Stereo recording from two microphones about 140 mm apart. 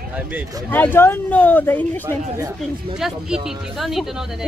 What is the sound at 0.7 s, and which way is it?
Speech, 15° left (ahead or behind).